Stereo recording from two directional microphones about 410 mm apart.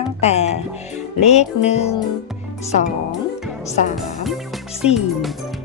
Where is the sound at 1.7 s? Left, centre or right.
Centre.